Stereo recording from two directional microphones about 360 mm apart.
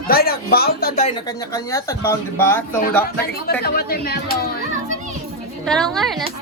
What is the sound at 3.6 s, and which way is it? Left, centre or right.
Speech, left.